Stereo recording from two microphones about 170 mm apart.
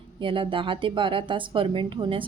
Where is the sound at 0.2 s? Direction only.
30° right (ahead or behind).